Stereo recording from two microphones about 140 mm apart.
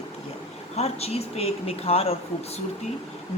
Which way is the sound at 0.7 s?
50° left (ahead or behind).